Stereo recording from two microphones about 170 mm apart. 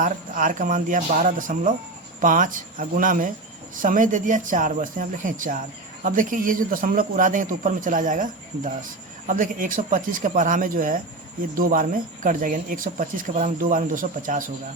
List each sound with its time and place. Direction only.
0.0 s speech: 55° right (ahead or behind)